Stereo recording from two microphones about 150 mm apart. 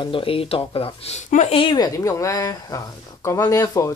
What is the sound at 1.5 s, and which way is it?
Speech, 35° left (ahead or behind).